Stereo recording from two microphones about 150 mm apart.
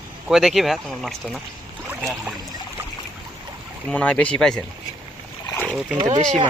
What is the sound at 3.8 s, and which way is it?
Speech, 5° left (ahead or behind).